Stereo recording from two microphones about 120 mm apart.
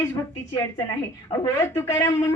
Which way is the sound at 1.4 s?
25° left (ahead or behind).